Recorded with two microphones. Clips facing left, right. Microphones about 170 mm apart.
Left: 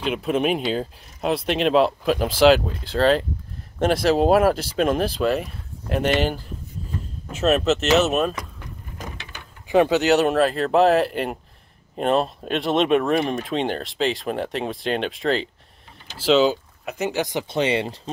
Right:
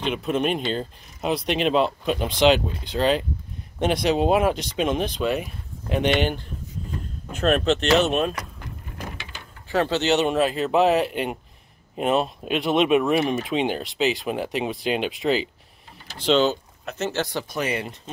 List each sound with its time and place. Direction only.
0.0 s speech: 5° left (ahead or behind)
7.3 s speech: 5° left (ahead or behind)
9.7 s speech: 15° left (ahead or behind); by 18.1 s 30° left (ahead or behind)